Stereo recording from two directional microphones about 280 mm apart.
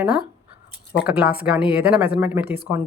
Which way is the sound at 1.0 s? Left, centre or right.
Centre.